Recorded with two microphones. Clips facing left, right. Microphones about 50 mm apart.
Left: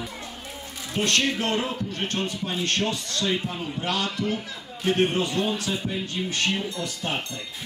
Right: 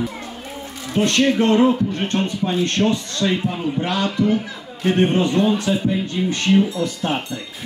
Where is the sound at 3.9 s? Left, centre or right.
Right.